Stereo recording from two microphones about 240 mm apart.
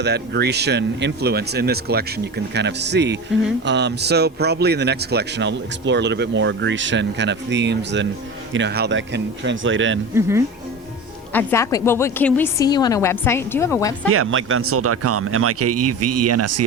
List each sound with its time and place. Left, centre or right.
0.0 s speech: right
10.2 s speech: centre
11.3 s a woman's voice: centre
14.1 s speech: right